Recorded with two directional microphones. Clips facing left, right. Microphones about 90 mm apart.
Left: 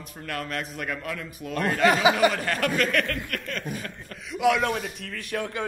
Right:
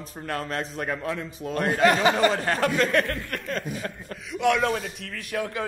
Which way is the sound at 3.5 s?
35° right (ahead or behind).